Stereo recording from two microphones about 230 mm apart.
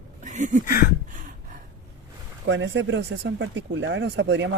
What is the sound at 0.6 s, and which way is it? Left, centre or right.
Speech, left.